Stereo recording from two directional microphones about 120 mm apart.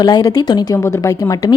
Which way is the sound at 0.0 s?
30° left (ahead or behind).